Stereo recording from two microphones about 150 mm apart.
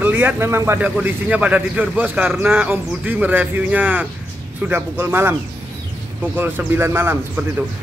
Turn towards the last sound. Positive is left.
turn(degrees=-15)  # may be behind; listen again after turning